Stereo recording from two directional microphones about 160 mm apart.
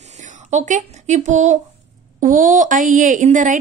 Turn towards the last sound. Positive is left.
turn(degrees=-55)  # may be behind; listen again after turning